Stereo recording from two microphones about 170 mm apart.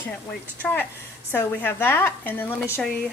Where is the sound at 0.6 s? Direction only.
10° left (ahead or behind).